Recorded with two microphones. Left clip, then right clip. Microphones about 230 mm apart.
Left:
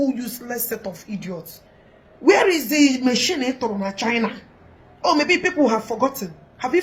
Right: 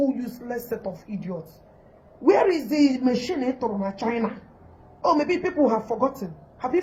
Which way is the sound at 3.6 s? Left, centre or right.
Left.